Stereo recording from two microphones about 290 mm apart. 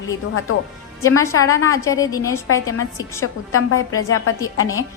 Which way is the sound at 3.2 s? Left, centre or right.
Left.